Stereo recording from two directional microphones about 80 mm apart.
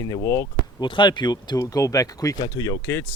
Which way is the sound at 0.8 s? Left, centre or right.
Left.